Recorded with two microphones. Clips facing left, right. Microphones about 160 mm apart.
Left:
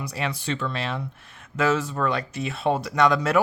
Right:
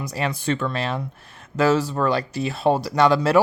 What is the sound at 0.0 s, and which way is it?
Speech, 40° right (ahead or behind).